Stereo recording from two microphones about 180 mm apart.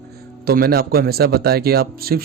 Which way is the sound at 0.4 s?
55° right (ahead or behind).